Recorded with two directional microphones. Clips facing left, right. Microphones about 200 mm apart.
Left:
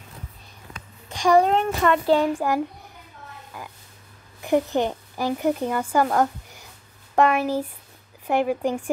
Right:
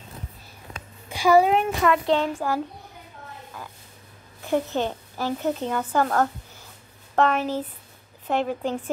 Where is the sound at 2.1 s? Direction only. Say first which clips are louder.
Left 3 dB; 15° left (ahead or behind).